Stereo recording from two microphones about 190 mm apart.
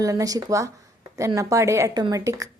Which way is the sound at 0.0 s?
20° right (ahead or behind).